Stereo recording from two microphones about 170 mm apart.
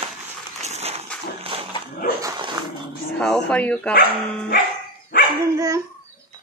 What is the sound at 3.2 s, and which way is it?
Speech, 5° left (ahead or behind).